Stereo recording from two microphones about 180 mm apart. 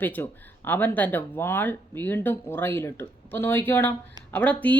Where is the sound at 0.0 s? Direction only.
10° left (ahead or behind).